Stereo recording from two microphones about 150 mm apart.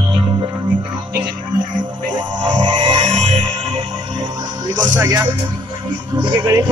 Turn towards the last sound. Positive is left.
turn(degrees=-25)  # may be behind; listen again after turning